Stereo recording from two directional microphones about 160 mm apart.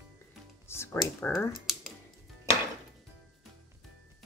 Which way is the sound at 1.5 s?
Centre (ahead or behind).